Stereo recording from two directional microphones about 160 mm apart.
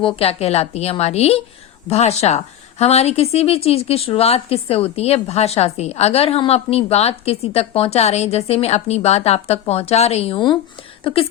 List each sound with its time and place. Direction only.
0.0 s a woman's voice: 40° left (ahead or behind)